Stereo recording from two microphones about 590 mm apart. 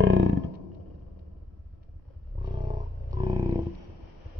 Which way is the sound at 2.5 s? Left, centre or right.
Centre.